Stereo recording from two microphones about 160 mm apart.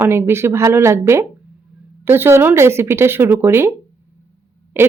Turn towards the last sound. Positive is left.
turn(degrees=-15)  # may be behind; listen again after turning